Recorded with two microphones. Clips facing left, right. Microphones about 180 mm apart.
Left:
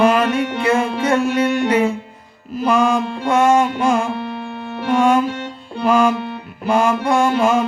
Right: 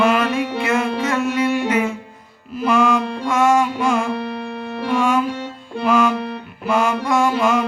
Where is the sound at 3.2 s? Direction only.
30° left (ahead or behind).